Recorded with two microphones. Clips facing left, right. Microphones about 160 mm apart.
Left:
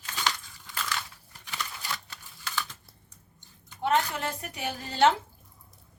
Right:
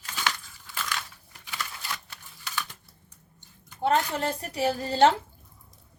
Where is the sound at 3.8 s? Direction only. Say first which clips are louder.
Right 2 dB; 30° right (ahead or behind).